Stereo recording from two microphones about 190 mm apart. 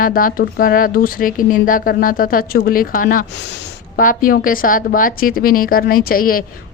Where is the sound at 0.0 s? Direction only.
45° left (ahead or behind).